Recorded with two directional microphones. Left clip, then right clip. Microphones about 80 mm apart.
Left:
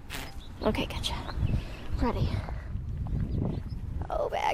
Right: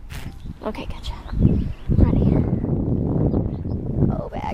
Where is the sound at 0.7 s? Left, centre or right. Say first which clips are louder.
Even; centre.